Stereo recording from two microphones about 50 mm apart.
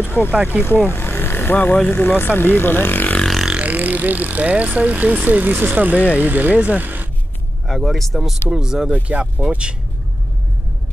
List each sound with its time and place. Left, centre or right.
0.0 s vehicle: left
0.3 s speech: right
0.9 s vehicle: left
1.9 s speech: left
3.5 s speech: right
7.6 s speech: centre
8.5 s speech: centre
8.9 s speech: right